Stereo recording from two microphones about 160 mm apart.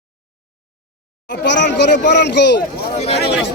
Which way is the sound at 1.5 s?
90° left.